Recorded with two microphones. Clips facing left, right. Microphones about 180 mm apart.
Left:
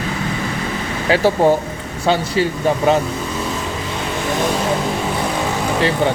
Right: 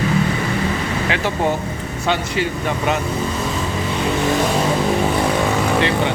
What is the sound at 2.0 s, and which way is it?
Speech, 35° left (ahead or behind).